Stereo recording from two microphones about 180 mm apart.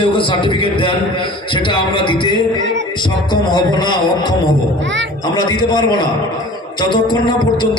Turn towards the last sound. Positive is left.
turn(degrees=25)  # may be behind; listen again after turning